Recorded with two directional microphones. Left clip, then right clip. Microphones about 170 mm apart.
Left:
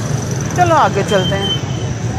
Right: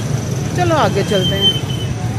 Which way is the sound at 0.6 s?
35° right (ahead or behind).